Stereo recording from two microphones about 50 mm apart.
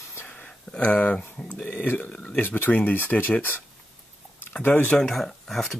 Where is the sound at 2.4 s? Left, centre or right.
Left.